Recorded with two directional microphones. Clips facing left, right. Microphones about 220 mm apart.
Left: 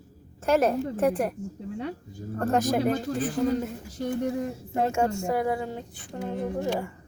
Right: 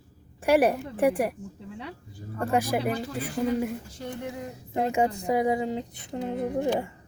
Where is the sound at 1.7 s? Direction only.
45° left (ahead or behind).